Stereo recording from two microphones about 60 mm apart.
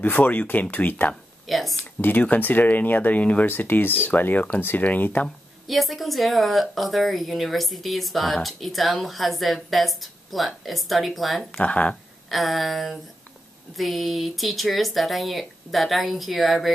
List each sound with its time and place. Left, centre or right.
0.0 s speech: left
1.5 s speech: centre
2.0 s speech: left
5.7 s a woman's voice: centre
11.5 s speech: left
11.9 s a woman's voice: centre